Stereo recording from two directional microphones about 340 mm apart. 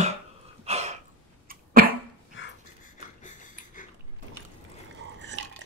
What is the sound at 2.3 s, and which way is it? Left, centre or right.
Pant, left.